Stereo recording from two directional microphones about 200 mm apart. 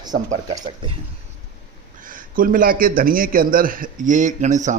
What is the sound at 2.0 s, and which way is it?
A man's voice, 45° right (ahead or behind).